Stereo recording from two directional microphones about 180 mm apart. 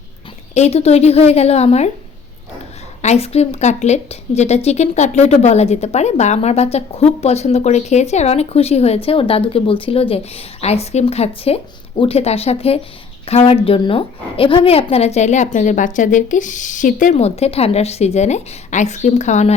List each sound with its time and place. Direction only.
0.5 s a woman's voice: 35° left (ahead or behind)
3.0 s a woman's voice: 35° left (ahead or behind)